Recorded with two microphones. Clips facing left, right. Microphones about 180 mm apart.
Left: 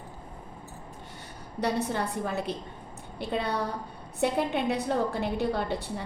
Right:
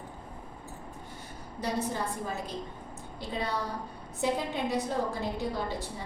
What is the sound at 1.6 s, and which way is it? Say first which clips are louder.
Speech: left 3 dB; 70° left (ahead or behind).